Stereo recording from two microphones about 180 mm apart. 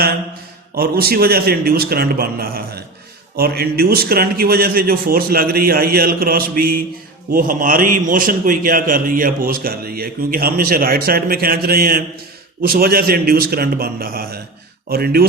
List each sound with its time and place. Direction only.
0.8 s a man's voice: 55° right (ahead or behind)